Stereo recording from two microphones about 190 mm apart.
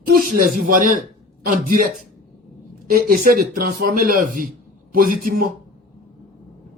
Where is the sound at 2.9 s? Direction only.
50° right (ahead or behind).